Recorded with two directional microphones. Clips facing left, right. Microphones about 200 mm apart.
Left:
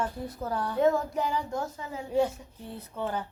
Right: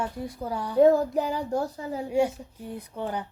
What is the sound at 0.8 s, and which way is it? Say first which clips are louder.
Speech: right 6 dB; 35° right (ahead or behind).